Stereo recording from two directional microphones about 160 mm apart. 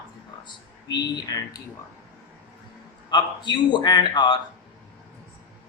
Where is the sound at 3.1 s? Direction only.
25° left (ahead or behind).